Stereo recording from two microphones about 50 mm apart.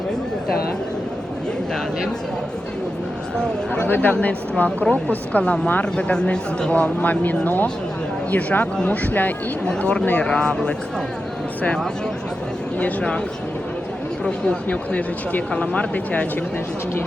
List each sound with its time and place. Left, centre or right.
3.8 s a woman's voice: left
9.6 s a woman's voice: centre
12.8 s a woman's voice: left
14.3 s a woman's voice: left